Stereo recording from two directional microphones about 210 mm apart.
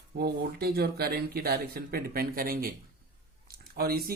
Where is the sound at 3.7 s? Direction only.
45° right (ahead or behind).